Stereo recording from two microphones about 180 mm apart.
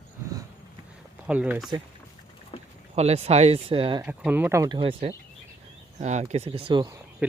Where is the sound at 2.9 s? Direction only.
35° right (ahead or behind).